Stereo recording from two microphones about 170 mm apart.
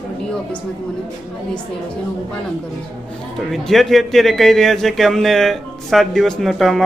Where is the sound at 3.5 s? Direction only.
Centre (ahead or behind).